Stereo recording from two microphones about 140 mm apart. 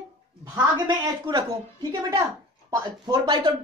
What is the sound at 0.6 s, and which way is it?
A woman's voice, 30° right (ahead or behind).